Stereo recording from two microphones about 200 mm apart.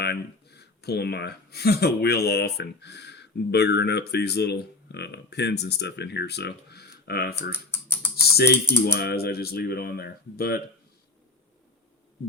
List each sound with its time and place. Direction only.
0.0 s speech: 55° left (ahead or behind)
7.5 s typing: 10° left (ahead or behind)
8.1 s speech: 50° left (ahead or behind)